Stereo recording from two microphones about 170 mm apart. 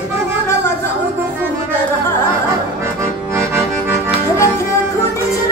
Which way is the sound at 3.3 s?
15° right (ahead or behind).